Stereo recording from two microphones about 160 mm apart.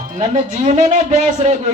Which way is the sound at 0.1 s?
50° right (ahead or behind).